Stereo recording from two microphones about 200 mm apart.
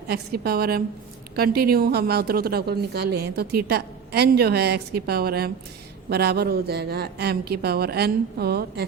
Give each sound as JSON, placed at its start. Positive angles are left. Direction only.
{"t": 0.1, "sound": "a woman's voice", "side_deg": -50}